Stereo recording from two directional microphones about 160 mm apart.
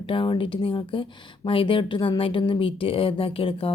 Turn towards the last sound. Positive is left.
turn(degrees=35)  # may be behind; listen again after turning